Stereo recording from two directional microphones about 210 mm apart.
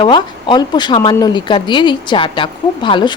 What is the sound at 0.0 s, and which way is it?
Speech, 20° left (ahead or behind).